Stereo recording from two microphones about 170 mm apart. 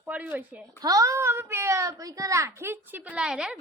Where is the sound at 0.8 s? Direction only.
20° right (ahead or behind).